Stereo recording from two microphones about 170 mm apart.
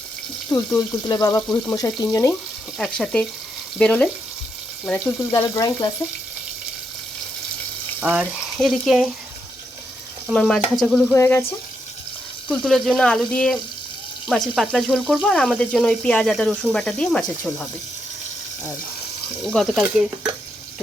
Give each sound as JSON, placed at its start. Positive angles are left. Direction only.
{"t": 0.5, "sound": "speech", "side_deg": 20}
{"t": 2.7, "sound": "speech", "side_deg": 5}
{"t": 4.9, "sound": "speech", "side_deg": 15}
{"t": 8.0, "sound": "speech", "side_deg": -10}
{"t": 10.2, "sound": "speech", "side_deg": 0}
{"t": 11.1, "sound": "speech", "side_deg": 15}
{"t": 12.5, "sound": "speech", "side_deg": 0}
{"t": 19.5, "sound": "speech", "side_deg": 0}